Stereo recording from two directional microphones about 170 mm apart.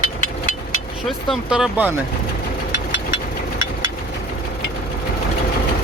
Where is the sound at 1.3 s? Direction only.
5° right (ahead or behind).